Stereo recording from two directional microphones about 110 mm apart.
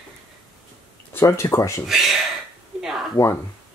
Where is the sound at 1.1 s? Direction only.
25° left (ahead or behind).